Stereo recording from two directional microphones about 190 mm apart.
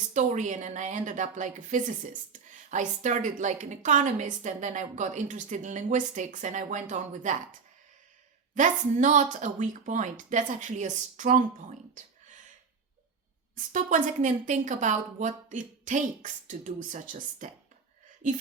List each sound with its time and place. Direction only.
0.1 s a woman's voice: 40° right (ahead or behind)
8.5 s a woman's voice: 40° right (ahead or behind)
13.6 s a woman's voice: 45° right (ahead or behind)